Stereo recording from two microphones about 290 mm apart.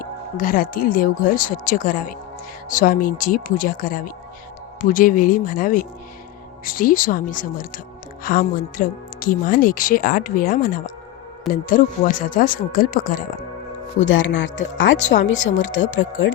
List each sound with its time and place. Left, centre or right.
0.0 s speech: left
14.1 s speech: left